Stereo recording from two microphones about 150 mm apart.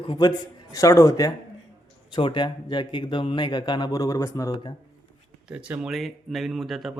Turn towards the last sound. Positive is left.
turn(degrees=0)  # may be behind; listen again after turning